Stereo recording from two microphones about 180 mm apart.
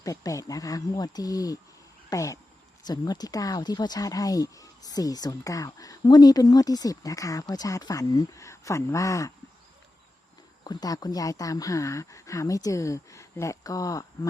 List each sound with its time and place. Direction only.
0.0 s speech: 20° left (ahead or behind)
2.0 s a sound: 20° left (ahead or behind)
2.8 s speech: 20° left (ahead or behind)
10.6 s speech: 20° left (ahead or behind)